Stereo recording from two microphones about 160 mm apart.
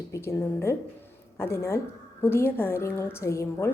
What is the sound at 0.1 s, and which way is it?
A woman's voice, 20° left (ahead or behind).